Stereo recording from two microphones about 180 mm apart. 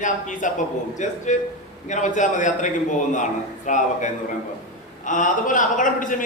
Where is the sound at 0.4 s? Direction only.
45° left (ahead or behind).